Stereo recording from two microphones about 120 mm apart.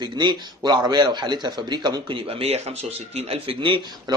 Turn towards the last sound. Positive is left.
turn(degrees=-45)  # may be behind; listen again after turning